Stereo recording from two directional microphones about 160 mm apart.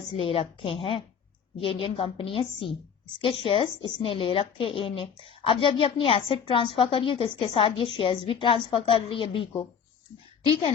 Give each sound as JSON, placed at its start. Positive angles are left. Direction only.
{"t": 0.1, "sound": "a woman's voice", "side_deg": 35}